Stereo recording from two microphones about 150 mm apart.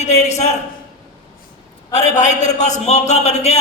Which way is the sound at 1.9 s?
50° left (ahead or behind).